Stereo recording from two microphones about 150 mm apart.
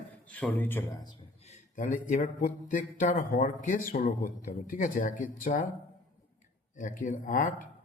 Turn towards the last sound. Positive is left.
turn(degrees=65)  # may be behind; listen again after turning